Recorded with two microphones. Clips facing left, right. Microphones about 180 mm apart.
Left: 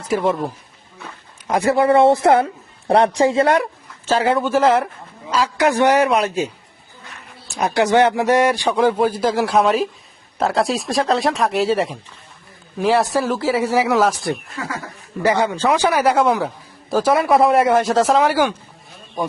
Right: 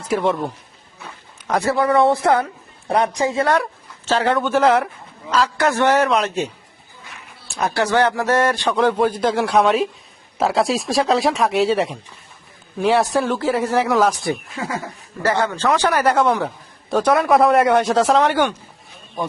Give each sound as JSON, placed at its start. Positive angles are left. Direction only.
{"t": 0.0, "sound": "speech", "side_deg": 0}
{"t": 1.5, "sound": "speech", "side_deg": 10}
{"t": 1.7, "sound": "a man's voice", "side_deg": 25}
{"t": 3.6, "sound": "speech", "side_deg": 10}
{"t": 5.3, "sound": "a man's voice", "side_deg": 10}
{"t": 7.5, "sound": "a man's voice", "side_deg": 15}
{"t": 15.4, "sound": "a man's voice", "side_deg": 10}